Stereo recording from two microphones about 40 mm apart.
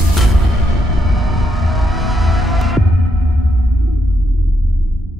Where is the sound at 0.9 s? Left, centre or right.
Centre.